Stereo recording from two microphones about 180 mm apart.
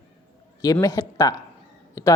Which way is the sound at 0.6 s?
20° left (ahead or behind).